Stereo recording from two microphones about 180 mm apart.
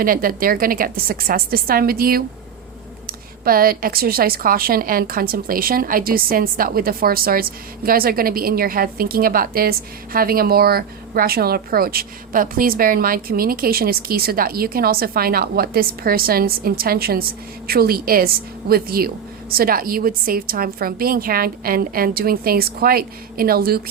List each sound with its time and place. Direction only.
0.0 s a woman's voice: 50° right (ahead or behind)